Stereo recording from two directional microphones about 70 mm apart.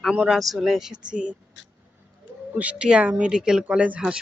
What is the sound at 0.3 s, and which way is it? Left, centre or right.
Speech, centre.